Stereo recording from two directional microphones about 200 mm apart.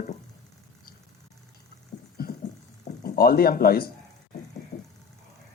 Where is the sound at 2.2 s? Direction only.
50° left (ahead or behind).